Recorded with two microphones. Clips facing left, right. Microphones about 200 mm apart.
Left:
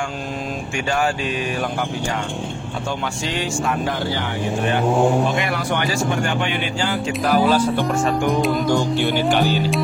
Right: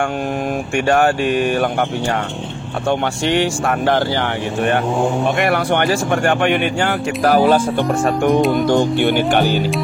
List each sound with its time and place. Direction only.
0.7 s speech: 60° right (ahead or behind)
2.9 s speech: 65° right (ahead or behind)
8.4 s music: centre (ahead or behind)
9.1 s speech: 55° right (ahead or behind)